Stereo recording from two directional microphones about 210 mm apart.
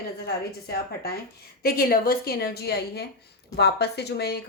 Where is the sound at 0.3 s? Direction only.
50° left (ahead or behind).